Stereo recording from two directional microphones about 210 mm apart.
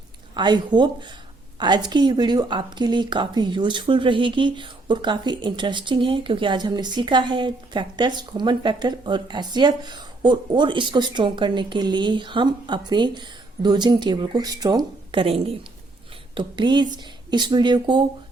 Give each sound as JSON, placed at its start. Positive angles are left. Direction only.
{"t": 0.3, "sound": "speech", "side_deg": -20}